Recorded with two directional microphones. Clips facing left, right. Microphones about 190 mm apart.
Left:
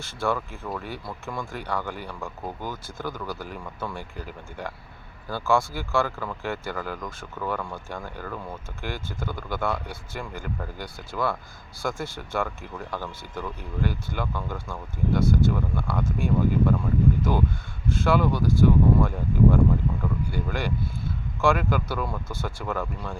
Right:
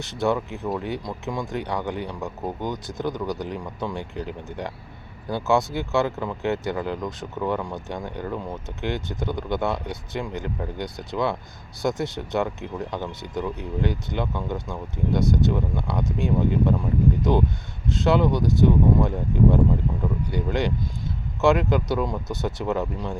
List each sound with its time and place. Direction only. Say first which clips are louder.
0.0 s speech: right 4 dB; 20° right (ahead or behind)